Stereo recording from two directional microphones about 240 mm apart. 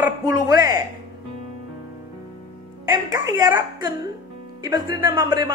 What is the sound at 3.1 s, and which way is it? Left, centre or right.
Speech, centre.